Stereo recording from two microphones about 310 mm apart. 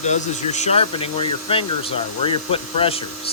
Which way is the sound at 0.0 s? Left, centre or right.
Left.